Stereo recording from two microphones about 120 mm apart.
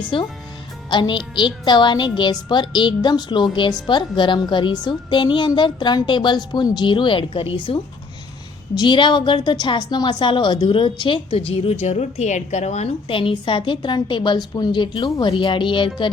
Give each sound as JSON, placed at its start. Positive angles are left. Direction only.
{"t": 0.1, "sound": "a woman's voice", "side_deg": 45}